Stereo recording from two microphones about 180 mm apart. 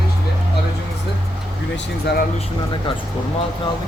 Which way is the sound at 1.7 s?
65° left (ahead or behind).